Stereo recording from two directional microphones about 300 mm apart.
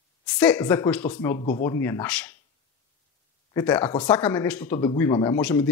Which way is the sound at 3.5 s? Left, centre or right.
Centre.